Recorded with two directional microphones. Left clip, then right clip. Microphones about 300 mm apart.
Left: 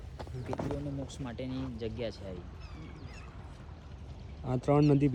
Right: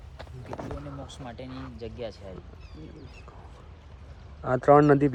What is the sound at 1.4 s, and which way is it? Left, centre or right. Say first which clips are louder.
Speech: left 1 dB; centre.